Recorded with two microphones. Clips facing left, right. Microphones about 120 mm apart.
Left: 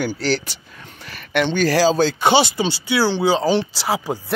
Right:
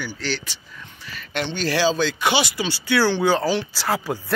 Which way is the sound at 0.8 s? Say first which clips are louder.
Right 1 dB; 65° left (ahead or behind).